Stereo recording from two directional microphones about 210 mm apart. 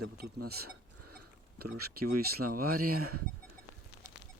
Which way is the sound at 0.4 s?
50° right (ahead or behind).